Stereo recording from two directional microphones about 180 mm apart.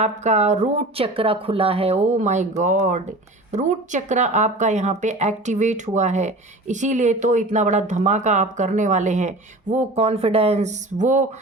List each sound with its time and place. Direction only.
0.0 s speech: 40° right (ahead or behind)